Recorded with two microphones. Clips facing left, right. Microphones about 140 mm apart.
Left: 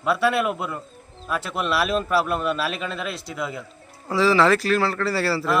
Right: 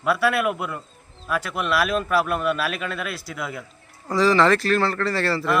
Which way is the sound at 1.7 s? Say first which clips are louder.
Right 1 dB; 30° left (ahead or behind).